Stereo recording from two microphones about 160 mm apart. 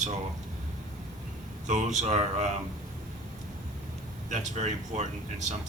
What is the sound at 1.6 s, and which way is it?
Speech, 45° right (ahead or behind).